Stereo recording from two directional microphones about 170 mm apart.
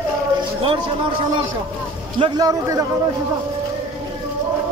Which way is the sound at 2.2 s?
20° right (ahead or behind).